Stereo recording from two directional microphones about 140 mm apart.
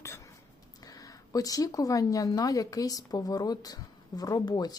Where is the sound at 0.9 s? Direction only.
25° left (ahead or behind).